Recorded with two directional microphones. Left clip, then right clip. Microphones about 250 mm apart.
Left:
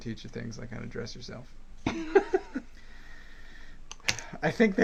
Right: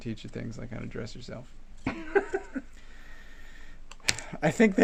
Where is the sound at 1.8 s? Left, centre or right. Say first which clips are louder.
Left 3 dB; left.